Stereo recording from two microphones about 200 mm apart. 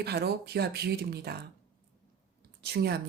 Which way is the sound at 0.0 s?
55° right (ahead or behind).